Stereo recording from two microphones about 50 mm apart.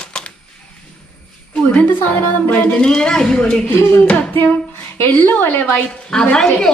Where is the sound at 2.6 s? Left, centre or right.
Centre.